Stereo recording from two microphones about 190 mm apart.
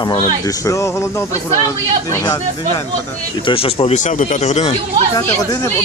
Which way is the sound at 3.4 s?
30° left (ahead or behind).